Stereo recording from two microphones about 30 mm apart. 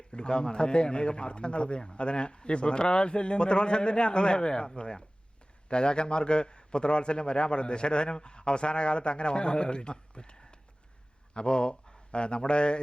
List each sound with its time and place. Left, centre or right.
0.1 s a man's voice: left